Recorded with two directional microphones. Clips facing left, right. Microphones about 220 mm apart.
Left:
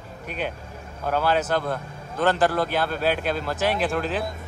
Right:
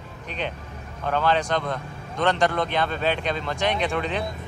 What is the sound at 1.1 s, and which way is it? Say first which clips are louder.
A man's voice: even; 5° left (ahead or behind).